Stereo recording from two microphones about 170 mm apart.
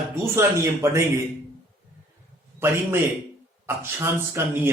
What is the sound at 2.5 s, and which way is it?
A man's voice, 15° right (ahead or behind).